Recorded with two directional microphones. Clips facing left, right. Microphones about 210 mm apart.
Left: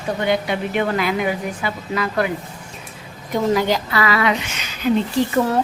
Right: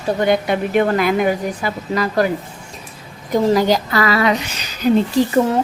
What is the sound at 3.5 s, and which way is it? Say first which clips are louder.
A woman's voice: right 1 dB; 40° right (ahead or behind).